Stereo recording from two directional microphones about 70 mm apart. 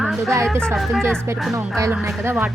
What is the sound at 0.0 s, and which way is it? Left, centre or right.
Speech, centre.